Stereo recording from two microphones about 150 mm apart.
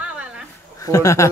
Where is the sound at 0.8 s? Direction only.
20° left (ahead or behind).